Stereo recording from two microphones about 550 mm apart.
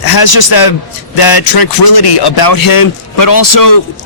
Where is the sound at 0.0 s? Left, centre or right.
Left.